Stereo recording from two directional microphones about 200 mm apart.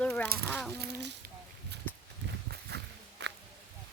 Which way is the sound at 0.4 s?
5° left (ahead or behind).